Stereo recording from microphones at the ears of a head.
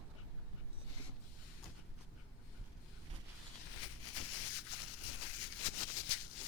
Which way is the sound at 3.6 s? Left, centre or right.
Left.